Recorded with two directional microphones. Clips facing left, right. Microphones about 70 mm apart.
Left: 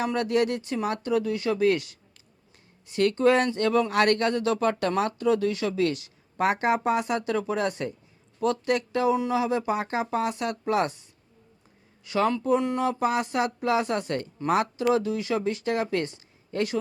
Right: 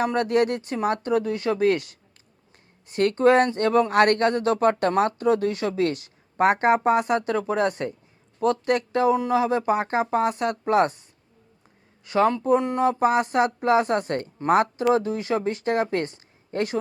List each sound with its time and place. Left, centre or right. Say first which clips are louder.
0.0 s speech: right 3 dB; right
12.0 s speech: right 4 dB; right